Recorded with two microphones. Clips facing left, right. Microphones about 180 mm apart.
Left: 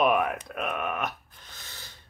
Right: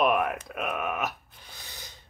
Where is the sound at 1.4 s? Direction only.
15° right (ahead or behind).